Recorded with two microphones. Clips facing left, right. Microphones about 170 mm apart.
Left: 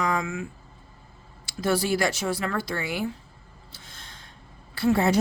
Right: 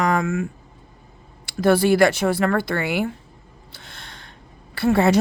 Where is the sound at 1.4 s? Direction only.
60° right (ahead or behind).